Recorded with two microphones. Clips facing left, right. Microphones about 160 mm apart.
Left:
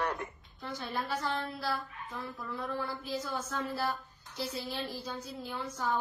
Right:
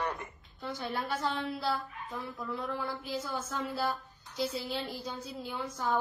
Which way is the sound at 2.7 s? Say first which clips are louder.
Even; 15° right (ahead or behind).